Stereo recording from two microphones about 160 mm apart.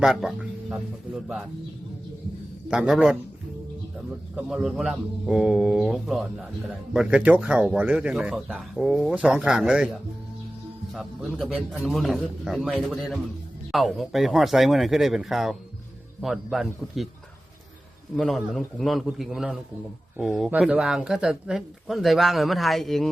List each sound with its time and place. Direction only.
0.0 s a man's voice: centre (ahead or behind)
2.6 s speech: 5° right (ahead or behind)
4.4 s speech: 5° right (ahead or behind)
10.9 s speech: centre (ahead or behind)
18.2 s speech: centre (ahead or behind)